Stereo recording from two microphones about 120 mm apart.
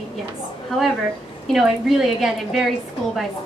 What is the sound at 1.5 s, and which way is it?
A woman's voice, centre (ahead or behind).